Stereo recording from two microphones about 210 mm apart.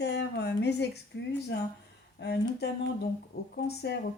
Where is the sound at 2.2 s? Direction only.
50° left (ahead or behind).